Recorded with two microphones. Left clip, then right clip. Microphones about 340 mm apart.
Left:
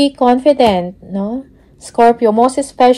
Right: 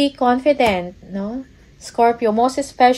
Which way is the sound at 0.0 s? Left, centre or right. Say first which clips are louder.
Left 5 dB; left.